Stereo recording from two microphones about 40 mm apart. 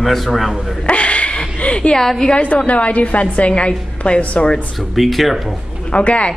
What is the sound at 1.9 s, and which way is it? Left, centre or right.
Speech, centre.